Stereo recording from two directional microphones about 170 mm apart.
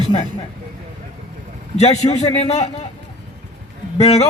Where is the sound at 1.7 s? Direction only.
40° left (ahead or behind).